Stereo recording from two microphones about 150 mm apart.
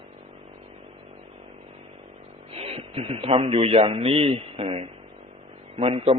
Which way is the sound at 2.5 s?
40° right (ahead or behind).